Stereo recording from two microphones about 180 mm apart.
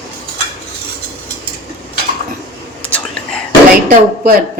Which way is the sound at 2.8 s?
10° left (ahead or behind).